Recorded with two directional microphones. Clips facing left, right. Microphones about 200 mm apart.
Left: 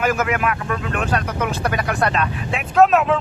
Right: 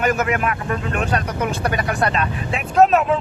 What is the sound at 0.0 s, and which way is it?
Speech, centre (ahead or behind).